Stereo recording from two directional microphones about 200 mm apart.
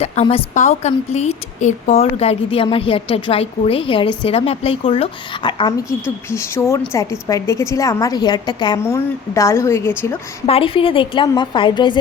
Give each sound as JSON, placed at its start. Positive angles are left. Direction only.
{"t": 0.0, "sound": "a woman's voice", "side_deg": 30}
{"t": 10.4, "sound": "a woman's voice", "side_deg": 30}